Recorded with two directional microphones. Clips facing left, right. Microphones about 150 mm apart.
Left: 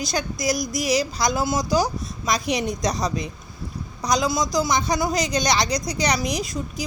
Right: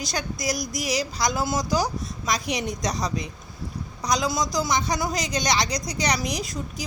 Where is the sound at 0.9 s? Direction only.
20° left (ahead or behind).